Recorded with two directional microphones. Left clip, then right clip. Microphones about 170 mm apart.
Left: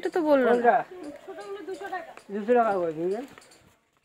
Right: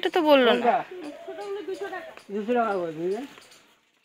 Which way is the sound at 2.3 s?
10° right (ahead or behind).